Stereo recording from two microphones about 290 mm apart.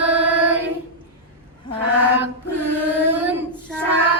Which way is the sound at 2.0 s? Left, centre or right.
Centre.